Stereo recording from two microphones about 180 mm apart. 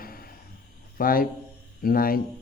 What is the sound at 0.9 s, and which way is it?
Speech, 50° left (ahead or behind).